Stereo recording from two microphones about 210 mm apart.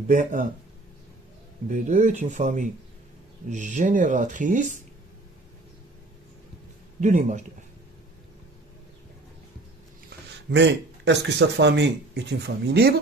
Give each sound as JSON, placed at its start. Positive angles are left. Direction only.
{"t": 0.1, "sound": "speech", "side_deg": -35}
{"t": 1.7, "sound": "speech", "side_deg": -35}
{"t": 7.0, "sound": "speech", "side_deg": -35}
{"t": 10.0, "sound": "speech", "side_deg": -55}